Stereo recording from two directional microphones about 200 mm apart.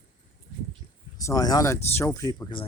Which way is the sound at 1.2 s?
15° left (ahead or behind).